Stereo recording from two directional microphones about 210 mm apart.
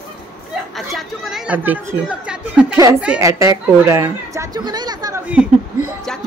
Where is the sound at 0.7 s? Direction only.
Centre (ahead or behind).